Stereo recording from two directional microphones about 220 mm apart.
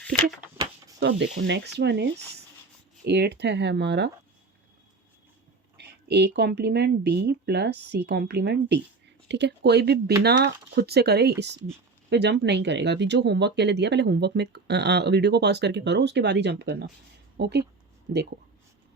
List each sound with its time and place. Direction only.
0.0 s speech: 5° left (ahead or behind)
0.9 s speech: 55° right (ahead or behind)
5.7 s speech: 50° right (ahead or behind)